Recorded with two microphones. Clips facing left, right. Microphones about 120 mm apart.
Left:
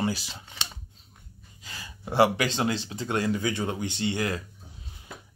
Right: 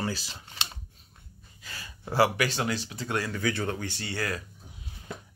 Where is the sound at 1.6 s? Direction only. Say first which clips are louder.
Left 1 dB; 20° left (ahead or behind).